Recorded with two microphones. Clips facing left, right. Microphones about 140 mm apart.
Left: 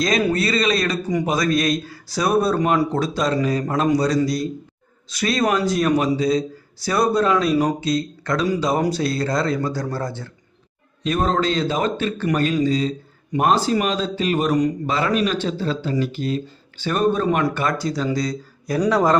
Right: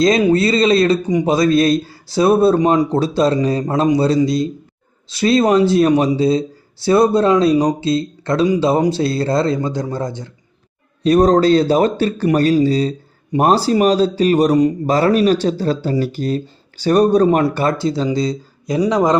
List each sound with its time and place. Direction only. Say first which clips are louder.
0.0 s a man's voice: right 7 dB; 20° right (ahead or behind)
11.0 s a man's voice: right 9 dB; 40° right (ahead or behind); by 19.1 s 15° right (ahead or behind)